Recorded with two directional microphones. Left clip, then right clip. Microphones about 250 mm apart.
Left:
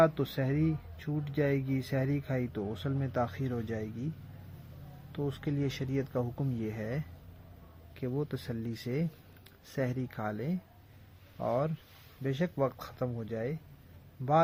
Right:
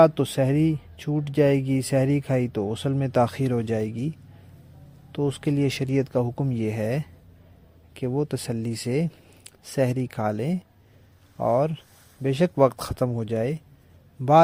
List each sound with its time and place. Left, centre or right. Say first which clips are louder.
0.0 s speech: right 9 dB; right
5.1 s speech: right 10 dB; right